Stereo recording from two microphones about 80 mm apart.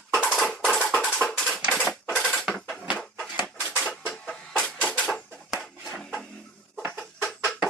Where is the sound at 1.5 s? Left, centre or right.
Centre.